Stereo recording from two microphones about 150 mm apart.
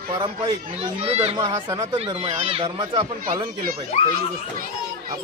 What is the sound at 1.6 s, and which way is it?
Speech, 25° right (ahead or behind).